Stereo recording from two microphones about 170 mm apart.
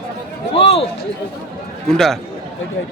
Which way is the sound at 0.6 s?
35° left (ahead or behind).